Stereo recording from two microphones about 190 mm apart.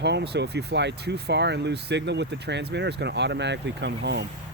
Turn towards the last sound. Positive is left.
turn(degrees=-65)  # may be behind; listen again after turning